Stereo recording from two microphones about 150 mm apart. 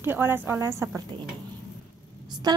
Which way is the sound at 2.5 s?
30° right (ahead or behind).